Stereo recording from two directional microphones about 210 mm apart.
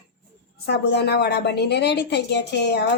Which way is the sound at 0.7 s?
50° left (ahead or behind).